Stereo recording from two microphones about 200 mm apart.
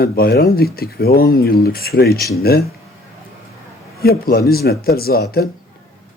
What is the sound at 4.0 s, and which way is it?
Speech, 50° left (ahead or behind).